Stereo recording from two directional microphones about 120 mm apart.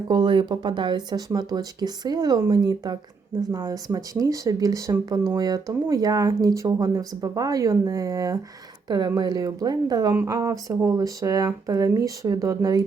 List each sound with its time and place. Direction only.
0.1 s speech: 40° right (ahead or behind)